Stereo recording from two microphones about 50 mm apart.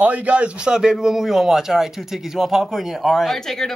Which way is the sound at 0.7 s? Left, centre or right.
Centre.